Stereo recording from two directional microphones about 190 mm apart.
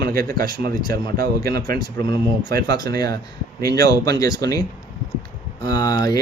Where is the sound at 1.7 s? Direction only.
25° left (ahead or behind).